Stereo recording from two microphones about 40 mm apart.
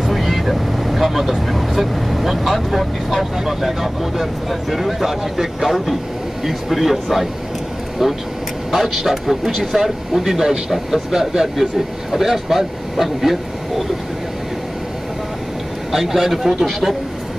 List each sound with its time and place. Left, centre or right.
0.0 s a man's voice: centre
15.9 s a man's voice: centre